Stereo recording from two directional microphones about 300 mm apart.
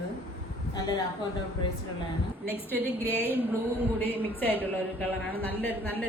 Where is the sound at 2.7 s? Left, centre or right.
Centre.